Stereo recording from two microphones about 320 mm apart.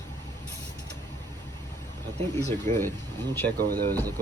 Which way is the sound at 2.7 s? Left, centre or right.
Right.